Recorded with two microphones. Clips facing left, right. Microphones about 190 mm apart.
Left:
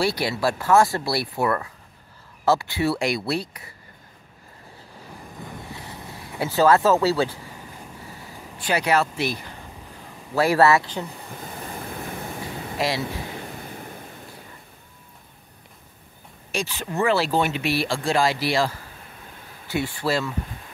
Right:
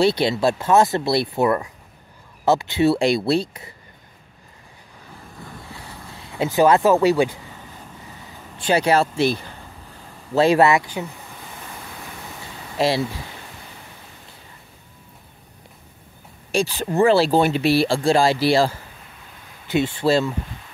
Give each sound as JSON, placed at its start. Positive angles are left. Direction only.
{"t": 0.0, "sound": "speech", "side_deg": -25}
{"t": 5.4, "sound": "vehicle", "side_deg": 20}
{"t": 6.1, "sound": "speech", "side_deg": -20}
{"t": 8.5, "sound": "speech", "side_deg": -25}
{"t": 12.7, "sound": "speech", "side_deg": -30}
{"t": 16.5, "sound": "speech", "side_deg": -35}